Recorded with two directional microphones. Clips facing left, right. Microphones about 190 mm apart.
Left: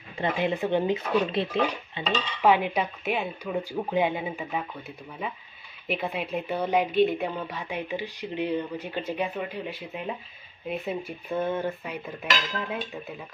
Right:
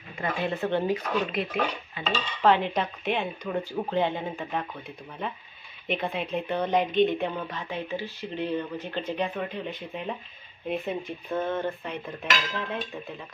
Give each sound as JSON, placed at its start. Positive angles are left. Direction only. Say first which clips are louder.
{"t": 0.2, "sound": "speech", "louder": "left 2 dB", "side_deg": 20}
{"t": 1.3, "sound": "speech", "louder": "left 2 dB", "side_deg": 30}
{"t": 2.1, "sound": "speech", "louder": "even", "side_deg": 10}